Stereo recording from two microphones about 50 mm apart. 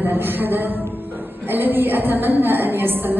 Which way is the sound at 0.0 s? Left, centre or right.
Right.